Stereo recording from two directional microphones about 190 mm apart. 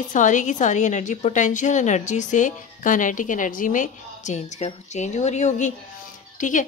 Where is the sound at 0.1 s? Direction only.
40° left (ahead or behind).